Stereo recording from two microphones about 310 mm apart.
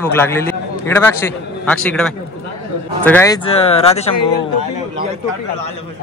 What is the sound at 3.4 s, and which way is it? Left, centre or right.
Speech, centre.